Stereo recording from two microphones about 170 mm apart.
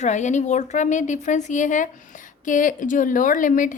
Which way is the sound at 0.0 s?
45° left (ahead or behind).